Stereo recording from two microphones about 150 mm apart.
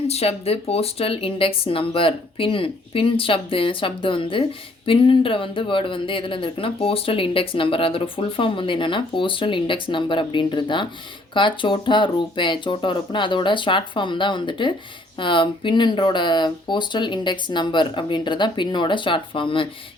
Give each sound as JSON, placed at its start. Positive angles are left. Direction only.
{"t": 0.1, "sound": "speech", "side_deg": 45}